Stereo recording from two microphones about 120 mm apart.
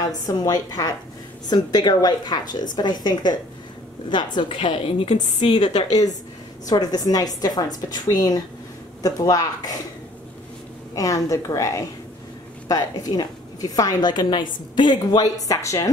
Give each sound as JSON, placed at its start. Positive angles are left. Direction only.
{"t": 0.0, "sound": "a woman's voice", "side_deg": 30}
{"t": 6.6, "sound": "a woman's voice", "side_deg": 35}
{"t": 11.0, "sound": "a woman's voice", "side_deg": 30}